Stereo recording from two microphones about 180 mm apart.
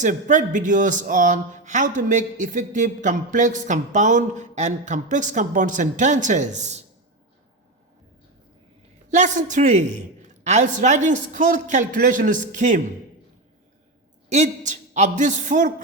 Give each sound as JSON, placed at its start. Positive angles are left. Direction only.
{"t": 0.0, "sound": "speech", "side_deg": -45}
{"t": 9.0, "sound": "speech", "side_deg": -40}
{"t": 14.3, "sound": "a man's voice", "side_deg": -40}